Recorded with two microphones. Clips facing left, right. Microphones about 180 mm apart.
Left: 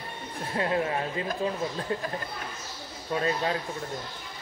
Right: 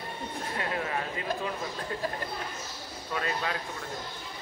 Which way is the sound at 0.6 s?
30° left (ahead or behind).